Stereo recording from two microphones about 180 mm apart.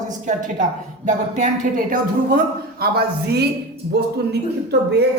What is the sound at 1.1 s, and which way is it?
Speech, 40° right (ahead or behind).